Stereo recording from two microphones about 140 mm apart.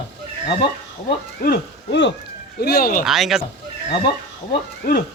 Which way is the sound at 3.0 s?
Centre (ahead or behind).